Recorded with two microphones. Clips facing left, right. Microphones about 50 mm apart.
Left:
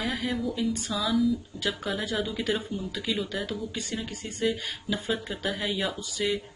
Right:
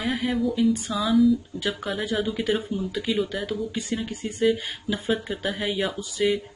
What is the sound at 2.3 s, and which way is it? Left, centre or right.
Speech, centre.